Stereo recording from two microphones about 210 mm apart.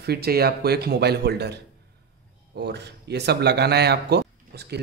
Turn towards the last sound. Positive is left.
turn(degrees=-50)  # may be behind; listen again after turning